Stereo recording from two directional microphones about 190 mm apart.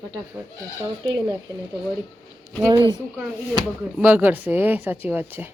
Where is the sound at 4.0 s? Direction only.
10° right (ahead or behind).